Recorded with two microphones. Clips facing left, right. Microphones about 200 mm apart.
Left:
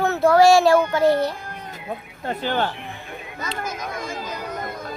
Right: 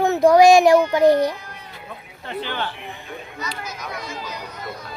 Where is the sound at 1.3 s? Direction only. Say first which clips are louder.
Left 2 dB; 50° left (ahead or behind).